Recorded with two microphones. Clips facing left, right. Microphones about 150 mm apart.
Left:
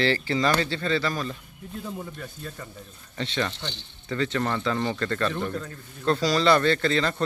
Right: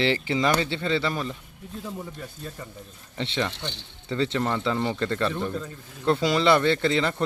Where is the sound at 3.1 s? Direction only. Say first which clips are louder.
Even; 20° right (ahead or behind).